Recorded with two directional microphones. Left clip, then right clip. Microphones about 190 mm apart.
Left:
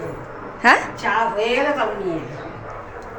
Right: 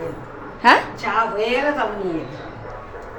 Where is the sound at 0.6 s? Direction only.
Centre (ahead or behind).